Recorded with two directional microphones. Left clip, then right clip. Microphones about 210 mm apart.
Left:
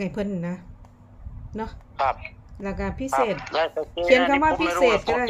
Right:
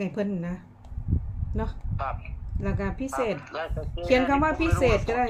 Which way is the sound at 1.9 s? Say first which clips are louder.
Left 12 dB; 45° left (ahead or behind).